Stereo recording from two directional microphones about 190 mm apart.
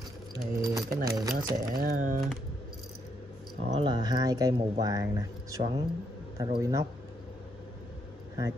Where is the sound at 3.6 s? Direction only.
30° right (ahead or behind).